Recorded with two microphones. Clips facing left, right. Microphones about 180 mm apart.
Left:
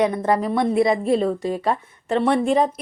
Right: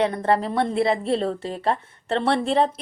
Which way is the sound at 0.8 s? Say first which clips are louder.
Left 4 dB; 30° right (ahead or behind).